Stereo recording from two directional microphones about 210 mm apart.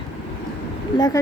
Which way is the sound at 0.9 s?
20° left (ahead or behind).